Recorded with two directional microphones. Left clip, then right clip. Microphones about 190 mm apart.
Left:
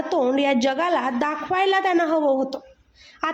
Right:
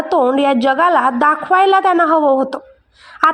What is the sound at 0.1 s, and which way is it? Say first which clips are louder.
A woman's voice: right 7 dB; 15° right (ahead or behind).